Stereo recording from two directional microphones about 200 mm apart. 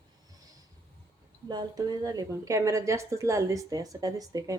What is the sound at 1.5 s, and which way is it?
A woman's voice, 20° right (ahead or behind).